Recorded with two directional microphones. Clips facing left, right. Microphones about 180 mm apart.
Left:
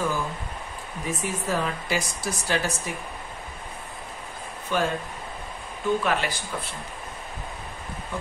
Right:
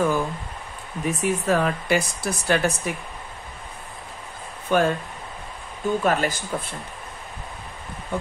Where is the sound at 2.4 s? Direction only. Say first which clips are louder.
Right 6 dB; 60° right (ahead or behind).